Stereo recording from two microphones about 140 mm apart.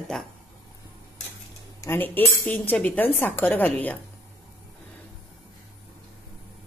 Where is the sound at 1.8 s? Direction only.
15° left (ahead or behind).